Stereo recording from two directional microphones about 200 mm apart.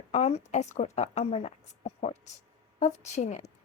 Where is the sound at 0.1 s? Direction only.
35° left (ahead or behind).